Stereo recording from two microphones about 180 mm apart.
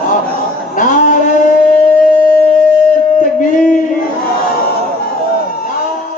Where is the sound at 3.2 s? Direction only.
45° left (ahead or behind).